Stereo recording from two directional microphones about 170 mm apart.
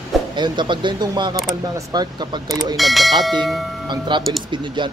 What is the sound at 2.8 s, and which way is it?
Speech, centre (ahead or behind).